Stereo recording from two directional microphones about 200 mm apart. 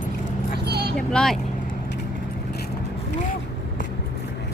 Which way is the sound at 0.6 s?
55° right (ahead or behind).